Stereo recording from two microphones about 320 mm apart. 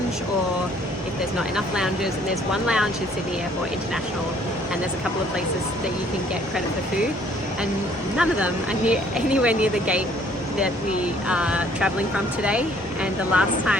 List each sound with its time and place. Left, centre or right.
1.4 s speech: centre
8.1 s speech: centre
11.0 s speech: centre